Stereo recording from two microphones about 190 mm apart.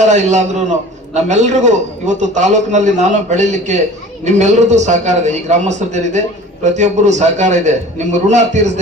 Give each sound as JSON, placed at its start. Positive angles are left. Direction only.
{"t": 0.0, "sound": "a man's voice", "side_deg": -40}